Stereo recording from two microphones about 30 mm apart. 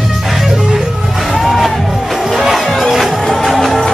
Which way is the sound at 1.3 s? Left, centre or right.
Centre.